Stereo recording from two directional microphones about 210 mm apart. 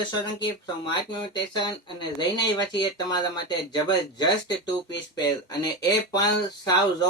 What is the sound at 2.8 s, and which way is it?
Speech, 20° left (ahead or behind).